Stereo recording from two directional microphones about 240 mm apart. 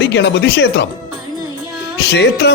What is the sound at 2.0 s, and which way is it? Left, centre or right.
Speech, left.